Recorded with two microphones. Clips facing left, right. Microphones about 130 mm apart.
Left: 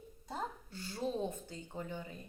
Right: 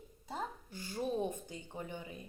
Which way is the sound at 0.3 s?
15° right (ahead or behind).